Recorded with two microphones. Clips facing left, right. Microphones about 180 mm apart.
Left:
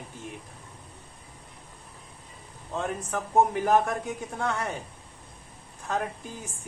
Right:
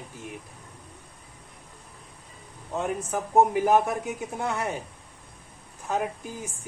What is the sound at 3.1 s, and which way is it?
Speech, 20° right (ahead or behind).